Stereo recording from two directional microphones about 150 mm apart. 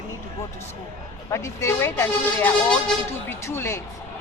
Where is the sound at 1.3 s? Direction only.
20° left (ahead or behind).